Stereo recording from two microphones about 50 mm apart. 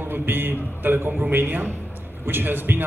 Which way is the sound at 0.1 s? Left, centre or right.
Right.